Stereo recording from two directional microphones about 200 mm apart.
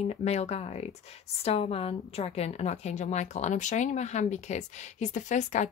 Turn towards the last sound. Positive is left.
turn(degrees=35)  # may be behind; listen again after turning